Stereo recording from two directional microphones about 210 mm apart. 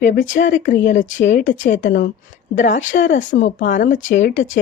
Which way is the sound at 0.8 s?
60° left (ahead or behind).